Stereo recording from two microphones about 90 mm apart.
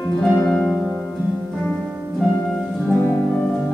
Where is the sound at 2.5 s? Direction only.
5° left (ahead or behind).